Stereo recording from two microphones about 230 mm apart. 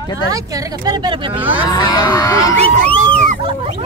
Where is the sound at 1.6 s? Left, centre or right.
Centre.